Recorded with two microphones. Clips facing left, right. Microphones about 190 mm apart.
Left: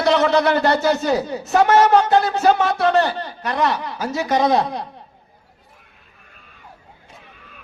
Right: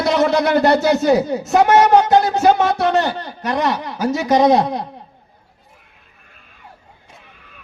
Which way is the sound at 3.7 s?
45° right (ahead or behind).